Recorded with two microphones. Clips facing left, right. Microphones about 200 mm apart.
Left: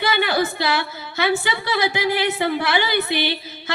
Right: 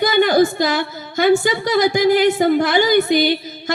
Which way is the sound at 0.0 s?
45° right (ahead or behind).